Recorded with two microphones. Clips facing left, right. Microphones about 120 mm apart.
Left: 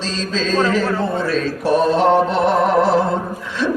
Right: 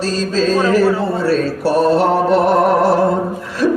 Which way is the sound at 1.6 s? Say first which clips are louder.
Even; centre (ahead or behind).